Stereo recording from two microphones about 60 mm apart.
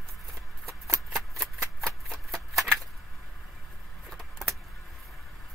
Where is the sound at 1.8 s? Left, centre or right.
Centre.